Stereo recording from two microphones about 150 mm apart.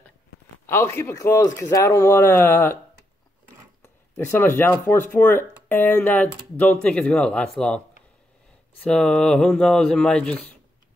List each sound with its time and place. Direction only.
0.7 s speech: 15° left (ahead or behind)
4.2 s speech: 15° left (ahead or behind)
8.8 s speech: 5° left (ahead or behind)